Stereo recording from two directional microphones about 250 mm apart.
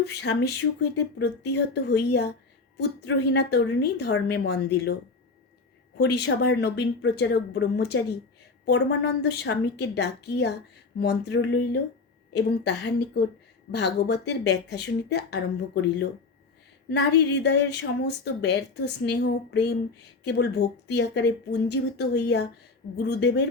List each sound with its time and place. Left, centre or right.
0.0 s speech: left
6.0 s a woman's voice: left